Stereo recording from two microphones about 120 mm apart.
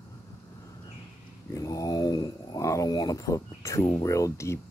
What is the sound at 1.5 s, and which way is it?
Speech, 30° left (ahead or behind).